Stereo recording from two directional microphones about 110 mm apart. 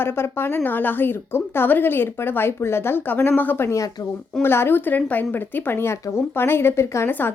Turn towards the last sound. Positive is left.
turn(degrees=20)  # may be behind; listen again after turning